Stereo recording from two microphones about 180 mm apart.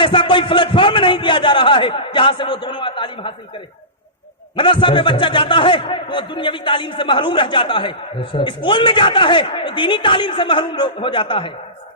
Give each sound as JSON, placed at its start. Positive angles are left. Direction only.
{"t": 0.0, "sound": "a man's voice", "side_deg": 25}
{"t": 4.5, "sound": "a man's voice", "side_deg": 25}